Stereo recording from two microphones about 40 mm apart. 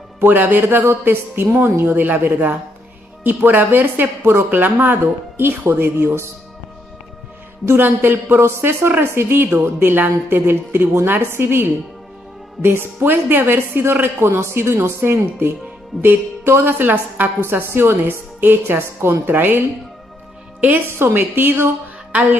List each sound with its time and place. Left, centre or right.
0.2 s a woman's voice: right
2.0 s a woman's voice: right
4.5 s a woman's voice: right
7.7 s a woman's voice: right
9.1 s a woman's voice: right
13.5 s a woman's voice: right
14.0 s a woman's voice: right
17.4 s a woman's voice: right
21.0 s a woman's voice: right
22.1 s music: right